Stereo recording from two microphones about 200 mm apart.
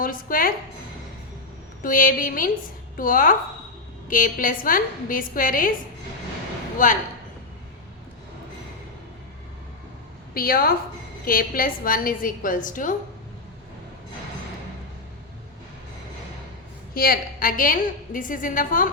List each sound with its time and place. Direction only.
0.0 s a woman's voice: 45° left (ahead or behind)
1.8 s a woman's voice: 45° left (ahead or behind)
6.8 s speech: 40° left (ahead or behind)
10.3 s a woman's voice: 45° left (ahead or behind)
16.9 s a woman's voice: 45° left (ahead or behind)